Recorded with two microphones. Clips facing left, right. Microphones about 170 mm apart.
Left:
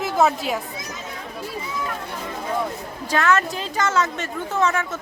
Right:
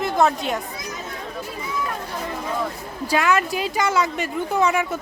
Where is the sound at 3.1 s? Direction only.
10° right (ahead or behind).